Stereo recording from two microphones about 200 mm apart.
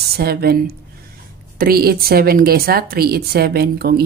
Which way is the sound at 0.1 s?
50° right (ahead or behind).